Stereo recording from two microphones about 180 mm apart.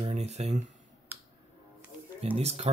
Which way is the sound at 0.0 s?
35° right (ahead or behind).